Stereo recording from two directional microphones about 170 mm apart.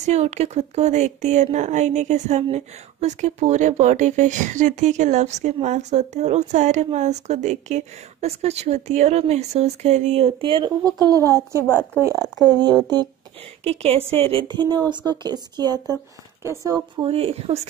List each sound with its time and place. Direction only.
0.0 s speech: 40° right (ahead or behind); by 11.6 s 20° right (ahead or behind)
11.6 s speech: 10° left (ahead or behind)
12.8 s a woman's voice: 25° right (ahead or behind)
13.7 s a woman's voice: 35° right (ahead or behind); by 16.8 s 20° right (ahead or behind)
17.0 s speech: 35° right (ahead or behind)